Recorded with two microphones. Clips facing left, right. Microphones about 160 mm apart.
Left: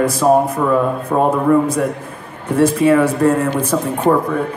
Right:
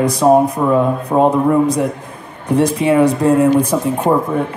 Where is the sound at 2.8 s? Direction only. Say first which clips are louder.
Even; 15° right (ahead or behind).